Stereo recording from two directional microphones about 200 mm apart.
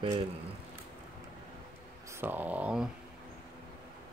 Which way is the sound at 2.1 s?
10° right (ahead or behind).